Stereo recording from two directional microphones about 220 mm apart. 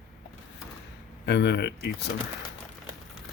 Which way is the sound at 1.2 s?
50° left (ahead or behind).